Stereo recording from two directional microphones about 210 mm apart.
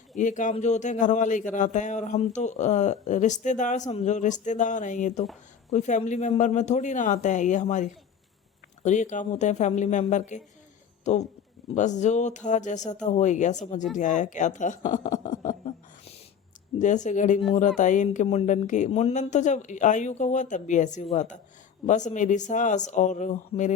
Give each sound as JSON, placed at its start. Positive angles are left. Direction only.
{"t": 0.2, "sound": "a man's voice", "side_deg": 35}